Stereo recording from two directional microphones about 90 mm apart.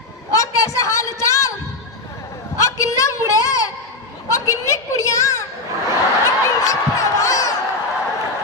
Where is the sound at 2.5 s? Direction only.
35° left (ahead or behind).